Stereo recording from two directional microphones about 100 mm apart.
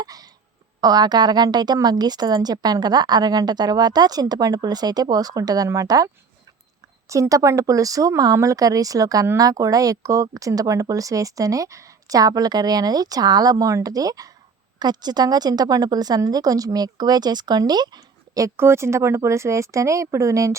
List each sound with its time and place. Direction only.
0.0 s a sound: 40° right (ahead or behind)
0.8 s a woman's voice: 40° right (ahead or behind)
7.1 s a woman's voice: 35° right (ahead or behind)
18.5 s speech: 25° right (ahead or behind)